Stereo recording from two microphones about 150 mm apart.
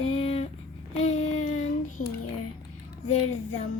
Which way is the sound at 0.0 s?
40° left (ahead or behind).